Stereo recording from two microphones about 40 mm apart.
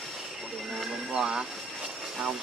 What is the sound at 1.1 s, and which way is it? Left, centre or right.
Speech, centre.